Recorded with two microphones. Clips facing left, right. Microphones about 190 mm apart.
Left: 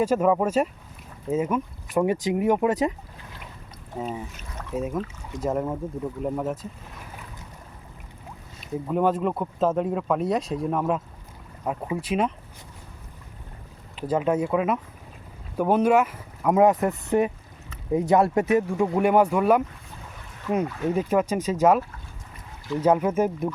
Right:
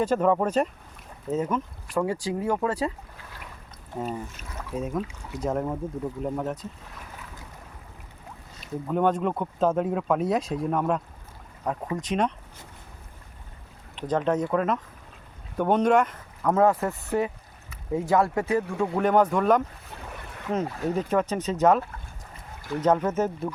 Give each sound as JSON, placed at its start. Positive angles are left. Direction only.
{"t": 0.0, "sound": "speech", "side_deg": 10}
{"t": 3.9, "sound": "speech", "side_deg": 5}
{"t": 8.6, "sound": "speech", "side_deg": 5}
{"t": 13.9, "sound": "speech", "side_deg": 5}
{"t": 20.9, "sound": "speech", "side_deg": 10}